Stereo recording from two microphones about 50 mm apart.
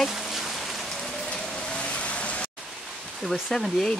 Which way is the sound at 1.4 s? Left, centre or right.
Centre.